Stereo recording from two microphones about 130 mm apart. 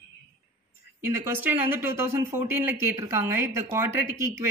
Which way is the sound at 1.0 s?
15° right (ahead or behind).